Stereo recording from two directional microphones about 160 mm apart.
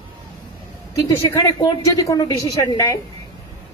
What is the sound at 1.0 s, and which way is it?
A woman's voice, 25° left (ahead or behind).